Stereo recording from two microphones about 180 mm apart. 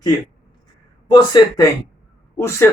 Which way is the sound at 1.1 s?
20° left (ahead or behind).